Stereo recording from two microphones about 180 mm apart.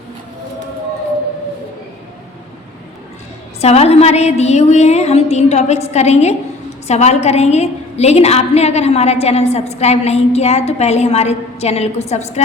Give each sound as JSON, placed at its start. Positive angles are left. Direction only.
{"t": 3.6, "sound": "a woman's voice", "side_deg": 35}